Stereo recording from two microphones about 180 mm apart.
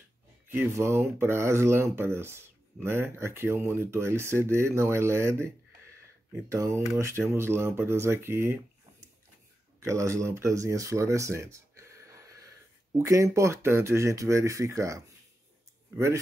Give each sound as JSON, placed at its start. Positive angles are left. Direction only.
{"t": 0.5, "sound": "speech", "side_deg": -15}
{"t": 6.5, "sound": "speech", "side_deg": -15}
{"t": 9.8, "sound": "speech", "side_deg": -15}